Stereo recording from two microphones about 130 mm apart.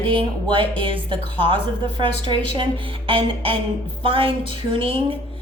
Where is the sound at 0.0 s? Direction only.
45° right (ahead or behind).